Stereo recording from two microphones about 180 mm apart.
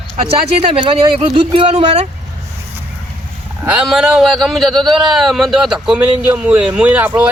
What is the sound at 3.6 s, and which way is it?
A man's voice, 5° right (ahead or behind).